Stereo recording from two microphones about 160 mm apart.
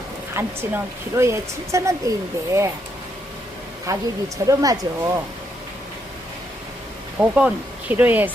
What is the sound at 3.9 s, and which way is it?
Speech, 20° right (ahead or behind).